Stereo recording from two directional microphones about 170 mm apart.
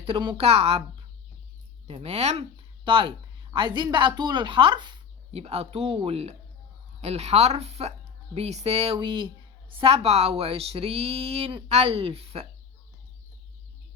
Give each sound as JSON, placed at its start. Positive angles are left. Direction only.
{"t": 0.0, "sound": "a woman's voice", "side_deg": -30}
{"t": 1.9, "sound": "a woman's voice", "side_deg": -40}
{"t": 9.0, "sound": "a woman's voice", "side_deg": -30}